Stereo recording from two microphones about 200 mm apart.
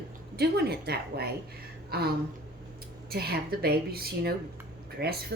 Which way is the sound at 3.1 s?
50° right (ahead or behind).